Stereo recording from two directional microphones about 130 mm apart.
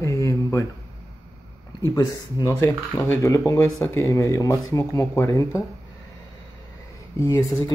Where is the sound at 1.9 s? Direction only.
25° left (ahead or behind).